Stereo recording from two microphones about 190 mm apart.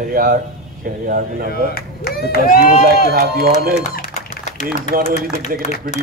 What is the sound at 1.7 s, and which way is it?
Speech, 50° left (ahead or behind).